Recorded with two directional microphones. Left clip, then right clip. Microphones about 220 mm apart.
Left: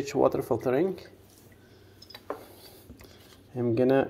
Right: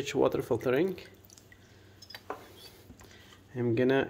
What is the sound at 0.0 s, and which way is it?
Speech, 20° right (ahead or behind).